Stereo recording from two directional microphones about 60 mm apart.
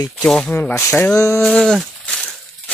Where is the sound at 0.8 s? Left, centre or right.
Left.